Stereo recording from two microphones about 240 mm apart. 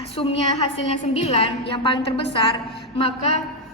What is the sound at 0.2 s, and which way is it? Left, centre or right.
A woman's voice, left.